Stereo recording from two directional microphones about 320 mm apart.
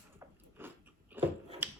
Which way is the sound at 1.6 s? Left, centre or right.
Centre.